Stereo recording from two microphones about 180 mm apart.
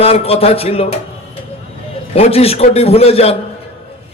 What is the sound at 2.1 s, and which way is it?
A man's voice, 35° left (ahead or behind).